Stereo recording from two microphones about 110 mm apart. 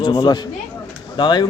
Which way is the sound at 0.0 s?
40° left (ahead or behind).